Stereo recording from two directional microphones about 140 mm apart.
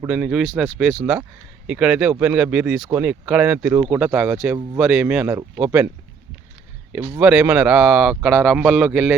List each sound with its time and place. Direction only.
0.1 s speech: 5° right (ahead or behind)
7.1 s speech: 10° right (ahead or behind)